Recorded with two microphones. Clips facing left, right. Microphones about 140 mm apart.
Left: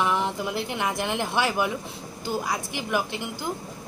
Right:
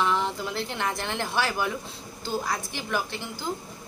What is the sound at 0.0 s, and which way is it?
A woman's voice, 15° left (ahead or behind).